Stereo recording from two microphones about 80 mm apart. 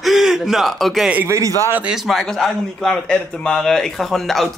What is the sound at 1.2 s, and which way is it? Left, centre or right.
Speech, right.